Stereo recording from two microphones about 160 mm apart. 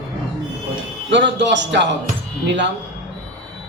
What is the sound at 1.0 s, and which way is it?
Speech, 90° right.